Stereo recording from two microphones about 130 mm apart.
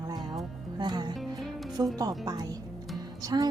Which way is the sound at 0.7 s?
35° right (ahead or behind).